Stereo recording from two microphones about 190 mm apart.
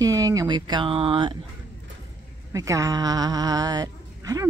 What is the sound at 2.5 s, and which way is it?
Speech, 15° right (ahead or behind).